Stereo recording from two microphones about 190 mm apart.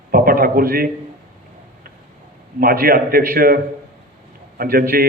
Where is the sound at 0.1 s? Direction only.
50° right (ahead or behind).